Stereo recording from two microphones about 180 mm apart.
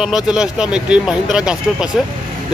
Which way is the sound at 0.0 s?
5° right (ahead or behind).